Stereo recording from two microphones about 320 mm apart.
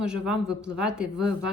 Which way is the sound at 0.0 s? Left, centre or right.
Centre.